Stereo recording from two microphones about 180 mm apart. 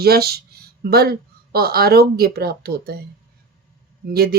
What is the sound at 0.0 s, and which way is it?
Speech, 60° right (ahead or behind).